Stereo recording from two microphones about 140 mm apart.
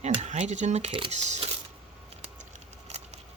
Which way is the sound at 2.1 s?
50° right (ahead or behind).